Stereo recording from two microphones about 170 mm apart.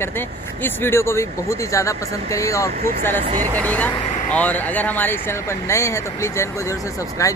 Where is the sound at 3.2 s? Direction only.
45° right (ahead or behind).